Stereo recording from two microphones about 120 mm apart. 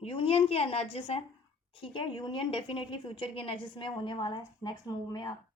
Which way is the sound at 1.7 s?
45° left (ahead or behind).